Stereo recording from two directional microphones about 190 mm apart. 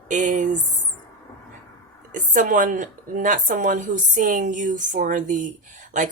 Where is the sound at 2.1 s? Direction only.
45° right (ahead or behind).